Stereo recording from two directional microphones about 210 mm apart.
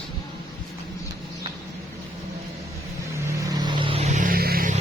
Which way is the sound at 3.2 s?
15° right (ahead or behind).